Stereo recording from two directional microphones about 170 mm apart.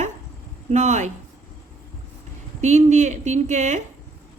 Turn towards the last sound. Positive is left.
turn(degrees=-45)  # may be behind; listen again after turning